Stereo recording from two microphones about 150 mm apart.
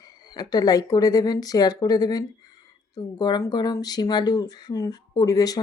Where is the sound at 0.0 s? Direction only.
25° left (ahead or behind).